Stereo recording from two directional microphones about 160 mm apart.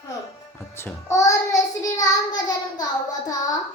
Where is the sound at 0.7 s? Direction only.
15° left (ahead or behind).